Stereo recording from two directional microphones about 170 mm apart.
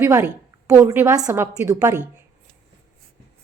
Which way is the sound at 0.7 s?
15° right (ahead or behind).